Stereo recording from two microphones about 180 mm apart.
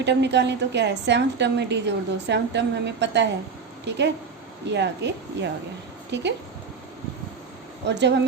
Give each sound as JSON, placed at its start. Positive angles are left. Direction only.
{"t": 0.0, "sound": "a woman's voice", "side_deg": -75}
{"t": 7.9, "sound": "a woman's voice", "side_deg": -70}